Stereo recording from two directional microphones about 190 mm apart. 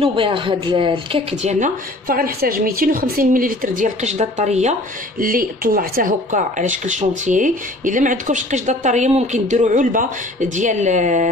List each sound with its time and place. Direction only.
0.0 s speech: 25° right (ahead or behind)
1.3 s speech: 40° right (ahead or behind)
5.2 s speech: 50° right (ahead or behind)